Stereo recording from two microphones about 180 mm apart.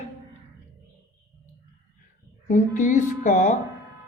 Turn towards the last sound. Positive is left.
turn(degrees=45)  # may be behind; listen again after turning